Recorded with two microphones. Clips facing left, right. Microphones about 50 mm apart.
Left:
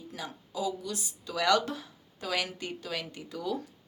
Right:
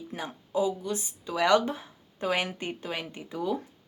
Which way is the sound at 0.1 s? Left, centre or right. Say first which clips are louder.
Right 8 dB; right.